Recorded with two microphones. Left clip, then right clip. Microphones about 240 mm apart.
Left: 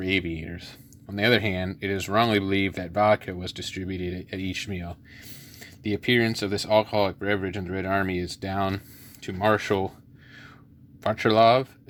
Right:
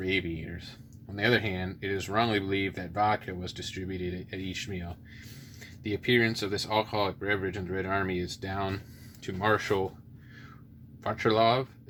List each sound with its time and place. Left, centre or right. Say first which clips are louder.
0.0 s speech: left 4 dB; left
11.0 s speech: left 6 dB; left